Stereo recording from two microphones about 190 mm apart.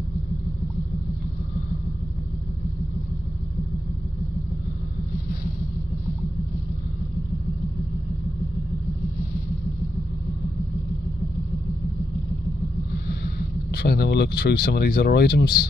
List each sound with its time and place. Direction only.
13.1 s speech: 55° left (ahead or behind)